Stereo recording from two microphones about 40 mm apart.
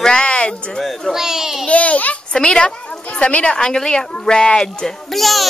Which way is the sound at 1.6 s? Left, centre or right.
Left.